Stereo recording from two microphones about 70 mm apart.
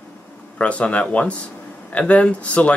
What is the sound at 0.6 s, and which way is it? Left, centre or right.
Speech, centre.